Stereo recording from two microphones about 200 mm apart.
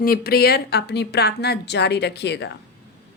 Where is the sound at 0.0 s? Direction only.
50° left (ahead or behind).